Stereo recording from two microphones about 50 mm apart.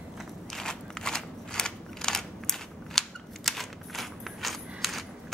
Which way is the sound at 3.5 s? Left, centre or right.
Centre.